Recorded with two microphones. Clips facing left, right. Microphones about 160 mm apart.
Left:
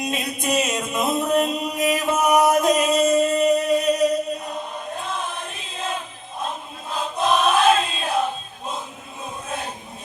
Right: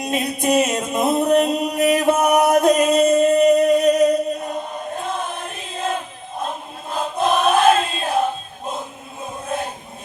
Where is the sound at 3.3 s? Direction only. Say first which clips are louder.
Right 5 dB; 55° right (ahead or behind).